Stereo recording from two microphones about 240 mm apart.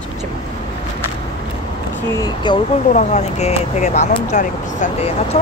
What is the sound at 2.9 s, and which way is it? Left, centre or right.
Speech, left.